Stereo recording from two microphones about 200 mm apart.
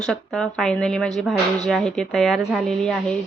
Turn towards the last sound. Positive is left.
turn(degrees=5)  # may be behind; listen again after turning